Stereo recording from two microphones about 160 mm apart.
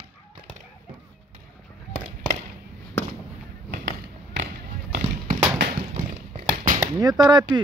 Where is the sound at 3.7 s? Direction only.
90° right.